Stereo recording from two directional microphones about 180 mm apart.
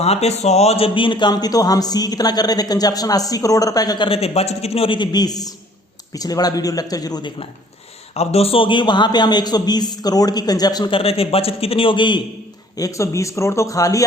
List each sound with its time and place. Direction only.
0.0 s speech: 35° left (ahead or behind)
8.1 s speech: 35° left (ahead or behind); by 14.0 s 20° left (ahead or behind)